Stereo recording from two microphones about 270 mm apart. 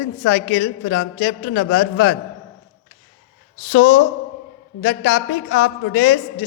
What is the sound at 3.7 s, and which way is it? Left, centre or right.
A woman's voice, left.